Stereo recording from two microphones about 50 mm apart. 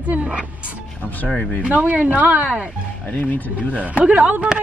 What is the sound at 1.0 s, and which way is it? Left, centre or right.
Speech, left.